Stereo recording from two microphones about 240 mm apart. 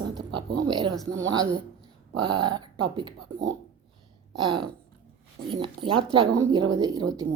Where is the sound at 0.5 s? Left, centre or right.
Centre.